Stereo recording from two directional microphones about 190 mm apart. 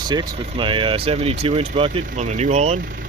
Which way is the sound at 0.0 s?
20° right (ahead or behind).